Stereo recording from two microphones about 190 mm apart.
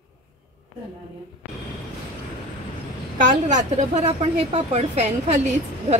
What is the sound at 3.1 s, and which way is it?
A woman's voice, 40° right (ahead or behind).